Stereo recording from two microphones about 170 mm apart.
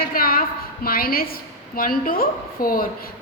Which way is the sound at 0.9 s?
60° left (ahead or behind).